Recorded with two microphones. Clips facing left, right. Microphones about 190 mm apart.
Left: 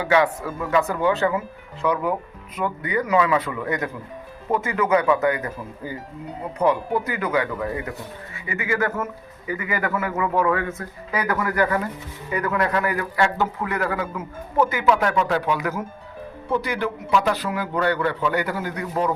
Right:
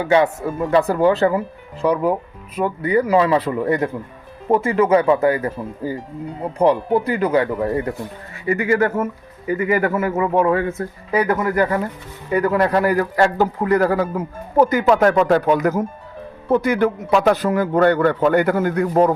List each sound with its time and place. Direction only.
0.1 s speech: 30° right (ahead or behind); by 19.1 s 50° right (ahead or behind)